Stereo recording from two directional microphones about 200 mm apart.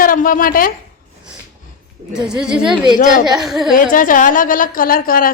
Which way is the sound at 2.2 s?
5° right (ahead or behind).